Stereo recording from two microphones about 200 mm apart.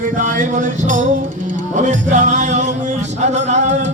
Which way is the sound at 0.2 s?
40° right (ahead or behind).